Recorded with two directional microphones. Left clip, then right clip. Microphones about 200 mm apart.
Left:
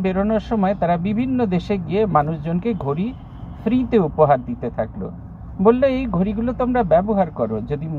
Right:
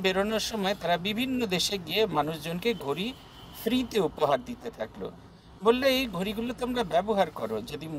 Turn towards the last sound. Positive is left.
turn(degrees=-15)  # may be behind; listen again after turning